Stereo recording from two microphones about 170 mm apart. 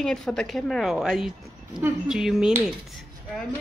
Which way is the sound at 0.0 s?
5° left (ahead or behind).